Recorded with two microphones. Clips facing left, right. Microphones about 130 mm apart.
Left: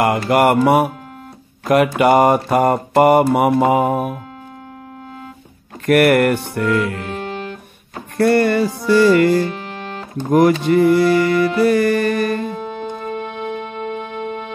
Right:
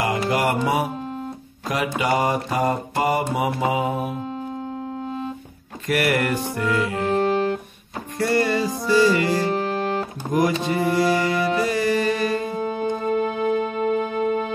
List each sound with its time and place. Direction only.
0.0 s mantra: 60° left (ahead or behind)
5.9 s mantra: 55° left (ahead or behind)
7.1 s music: 40° right (ahead or behind)
8.2 s mantra: 60° left (ahead or behind)
9.4 s music: 35° right (ahead or behind)
10.3 s mantra: 60° left (ahead or behind)
12.5 s music: 5° right (ahead or behind)
13.1 s music: 35° right (ahead or behind)